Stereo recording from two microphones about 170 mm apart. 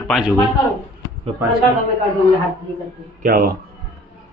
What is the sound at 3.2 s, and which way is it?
Speech, 60° right (ahead or behind).